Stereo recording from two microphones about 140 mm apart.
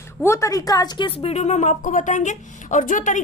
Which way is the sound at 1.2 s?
50° left (ahead or behind).